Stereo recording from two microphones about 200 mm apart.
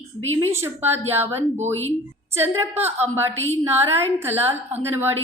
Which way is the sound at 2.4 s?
10° right (ahead or behind).